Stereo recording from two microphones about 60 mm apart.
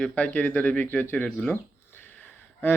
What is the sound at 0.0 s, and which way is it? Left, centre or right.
Speech, left.